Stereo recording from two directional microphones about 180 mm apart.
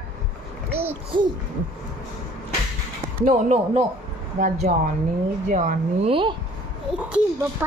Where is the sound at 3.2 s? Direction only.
40° right (ahead or behind).